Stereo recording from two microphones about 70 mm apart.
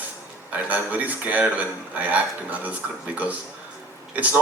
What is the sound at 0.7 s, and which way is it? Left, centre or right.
Speech, right.